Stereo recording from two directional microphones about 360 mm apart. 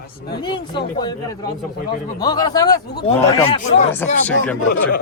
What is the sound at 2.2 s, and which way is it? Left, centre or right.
A man's voice, centre.